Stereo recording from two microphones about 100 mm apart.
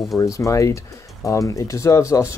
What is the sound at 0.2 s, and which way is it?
Speech, 35° left (ahead or behind).